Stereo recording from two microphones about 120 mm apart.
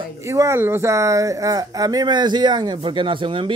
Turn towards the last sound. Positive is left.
turn(degrees=-45)  # may be behind; listen again after turning